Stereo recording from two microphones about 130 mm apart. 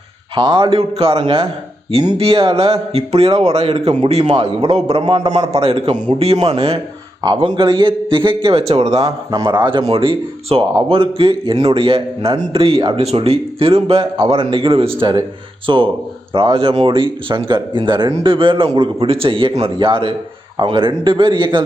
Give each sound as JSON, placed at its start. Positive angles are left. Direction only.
{"t": 0.3, "sound": "a man's voice", "side_deg": -40}
{"t": 7.2, "sound": "speech", "side_deg": -35}
{"t": 9.0, "sound": "a man's voice", "side_deg": -25}
{"t": 9.5, "sound": "speech", "side_deg": -40}